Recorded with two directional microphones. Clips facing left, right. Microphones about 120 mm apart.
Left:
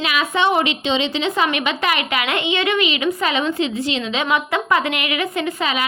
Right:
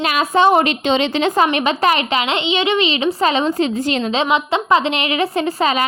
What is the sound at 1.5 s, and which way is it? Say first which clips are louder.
A woman's voice: right 5 dB; 35° right (ahead or behind).